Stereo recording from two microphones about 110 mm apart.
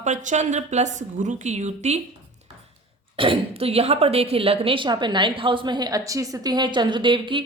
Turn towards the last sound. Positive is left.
turn(degrees=-50)  # may be behind; listen again after turning